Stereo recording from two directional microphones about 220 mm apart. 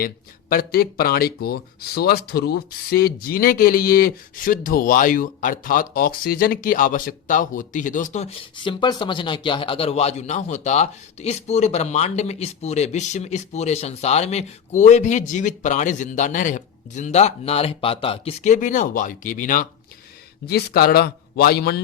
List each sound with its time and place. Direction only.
0.0 s speech: 40° left (ahead or behind)
20.5 s speech: 45° left (ahead or behind)